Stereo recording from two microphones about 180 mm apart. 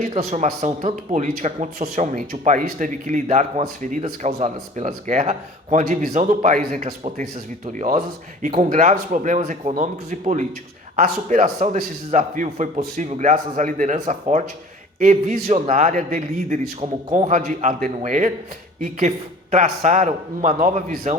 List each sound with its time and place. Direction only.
0.0 s a man's voice: 40° right (ahead or behind)